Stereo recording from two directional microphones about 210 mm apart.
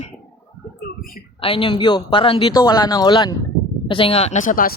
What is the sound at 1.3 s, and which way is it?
Speech, 25° left (ahead or behind).